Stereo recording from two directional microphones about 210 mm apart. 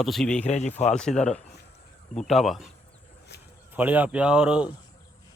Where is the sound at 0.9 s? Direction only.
5° left (ahead or behind).